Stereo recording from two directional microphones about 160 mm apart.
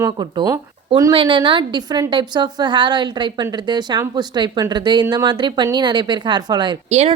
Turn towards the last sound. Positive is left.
turn(degrees=-45)  # may be behind; listen again after turning